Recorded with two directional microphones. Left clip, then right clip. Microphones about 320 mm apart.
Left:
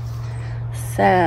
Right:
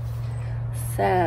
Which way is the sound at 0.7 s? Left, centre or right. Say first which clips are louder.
Left 6 dB; left.